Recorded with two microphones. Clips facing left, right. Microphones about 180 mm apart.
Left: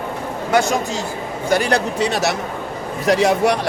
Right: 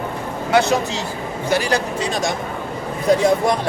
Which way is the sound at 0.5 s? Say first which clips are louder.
Right 1 dB; 45° left (ahead or behind).